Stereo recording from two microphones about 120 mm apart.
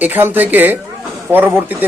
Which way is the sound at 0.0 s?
15° right (ahead or behind).